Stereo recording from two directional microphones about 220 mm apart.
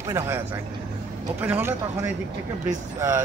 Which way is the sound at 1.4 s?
10° right (ahead or behind).